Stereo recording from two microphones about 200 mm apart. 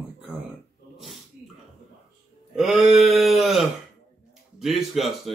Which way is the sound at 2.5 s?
Centre (ahead or behind).